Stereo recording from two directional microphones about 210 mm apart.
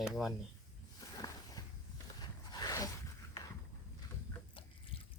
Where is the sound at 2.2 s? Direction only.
20° left (ahead or behind).